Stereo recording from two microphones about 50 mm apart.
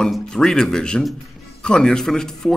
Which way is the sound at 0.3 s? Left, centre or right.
Centre.